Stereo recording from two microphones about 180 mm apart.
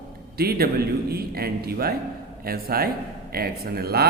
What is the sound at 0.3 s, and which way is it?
Speech, 60° right (ahead or behind).